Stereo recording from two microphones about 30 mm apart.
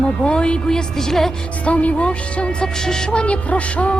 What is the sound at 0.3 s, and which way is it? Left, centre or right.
Speech, left.